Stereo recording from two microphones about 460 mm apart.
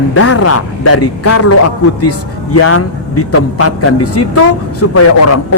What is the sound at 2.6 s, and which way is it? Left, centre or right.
A man's voice, left.